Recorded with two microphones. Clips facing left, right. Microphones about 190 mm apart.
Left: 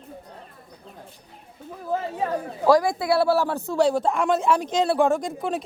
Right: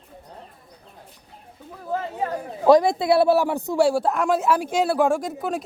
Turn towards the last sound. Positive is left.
turn(degrees=-5)  # may be behind; listen again after turning